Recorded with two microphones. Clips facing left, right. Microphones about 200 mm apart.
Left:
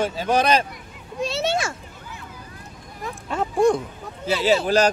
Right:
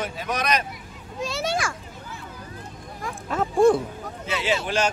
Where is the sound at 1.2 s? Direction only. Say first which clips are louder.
Left 3 dB; 25° left (ahead or behind).